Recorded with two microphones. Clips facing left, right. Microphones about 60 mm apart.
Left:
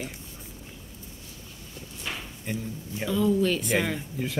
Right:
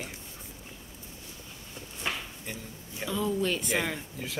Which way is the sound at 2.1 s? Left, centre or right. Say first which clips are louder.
Right 2 dB; right.